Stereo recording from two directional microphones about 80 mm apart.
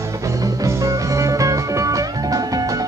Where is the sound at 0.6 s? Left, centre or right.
Right.